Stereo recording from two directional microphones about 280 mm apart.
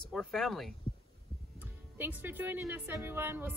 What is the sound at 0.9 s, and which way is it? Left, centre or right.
Heart sounds, centre.